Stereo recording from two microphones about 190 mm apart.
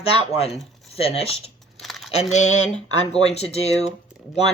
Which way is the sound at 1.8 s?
Centre (ahead or behind).